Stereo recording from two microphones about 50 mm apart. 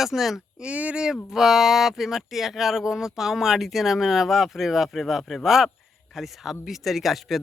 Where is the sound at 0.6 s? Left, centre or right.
Right.